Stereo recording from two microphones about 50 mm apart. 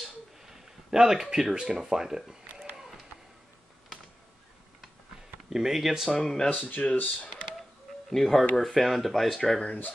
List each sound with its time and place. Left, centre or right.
0.0 s a sound: centre
5.5 s speech: centre
6.0 s speech: centre
6.5 s speech: left
8.1 s speech: centre
9.6 s speech: left